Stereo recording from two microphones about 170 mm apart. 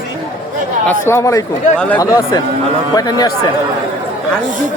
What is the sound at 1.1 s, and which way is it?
Speech, 15° left (ahead or behind).